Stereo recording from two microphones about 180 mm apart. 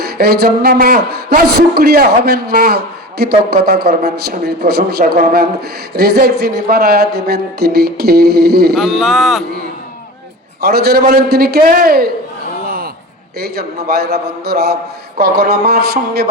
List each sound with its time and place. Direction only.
0.0 s a man's voice: 60° right (ahead or behind)
8.7 s speech: centre (ahead or behind)
10.6 s a man's voice: 60° right (ahead or behind)
12.6 s a sound: 60° right (ahead or behind)
13.4 s a man's voice: 60° right (ahead or behind)